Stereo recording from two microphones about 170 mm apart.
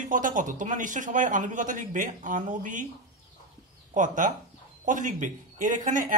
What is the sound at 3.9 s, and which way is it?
A woman's voice, 50° right (ahead or behind).